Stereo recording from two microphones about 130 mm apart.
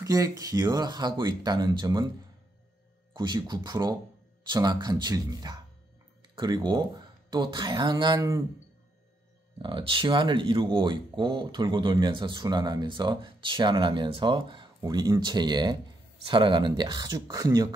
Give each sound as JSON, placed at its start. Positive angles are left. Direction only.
{"t": 0.0, "sound": "speech", "side_deg": -25}
{"t": 3.1, "sound": "speech", "side_deg": -35}
{"t": 9.6, "sound": "speech", "side_deg": -40}